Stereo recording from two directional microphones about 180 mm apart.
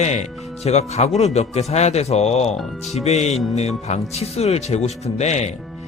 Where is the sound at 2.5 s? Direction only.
Centre (ahead or behind).